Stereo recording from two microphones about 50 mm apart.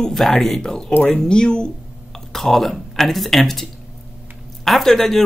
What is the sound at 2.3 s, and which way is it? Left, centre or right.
Speech, centre.